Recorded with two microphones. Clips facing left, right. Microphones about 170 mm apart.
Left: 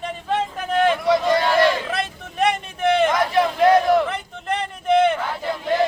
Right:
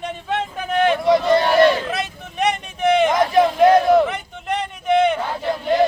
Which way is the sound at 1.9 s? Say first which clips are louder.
Even; centre (ahead or behind).